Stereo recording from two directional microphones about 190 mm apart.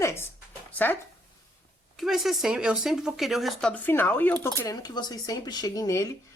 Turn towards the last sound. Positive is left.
turn(degrees=15)  # may be behind; listen again after turning